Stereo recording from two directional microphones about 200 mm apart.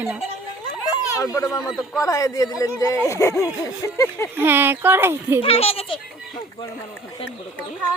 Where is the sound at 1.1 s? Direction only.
15° left (ahead or behind).